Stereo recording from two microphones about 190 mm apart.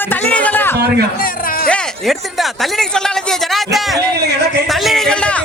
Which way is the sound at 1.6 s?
5° left (ahead or behind).